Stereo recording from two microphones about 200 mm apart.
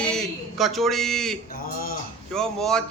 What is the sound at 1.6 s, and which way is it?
Speech, 45° left (ahead or behind).